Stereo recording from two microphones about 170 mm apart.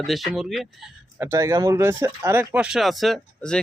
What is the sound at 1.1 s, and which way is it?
Speech, 15° right (ahead or behind).